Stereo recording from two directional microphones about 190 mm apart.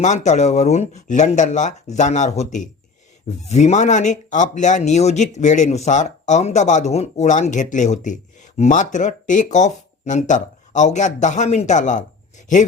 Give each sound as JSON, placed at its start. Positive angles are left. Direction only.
{"t": 0.0, "sound": "speech", "side_deg": 40}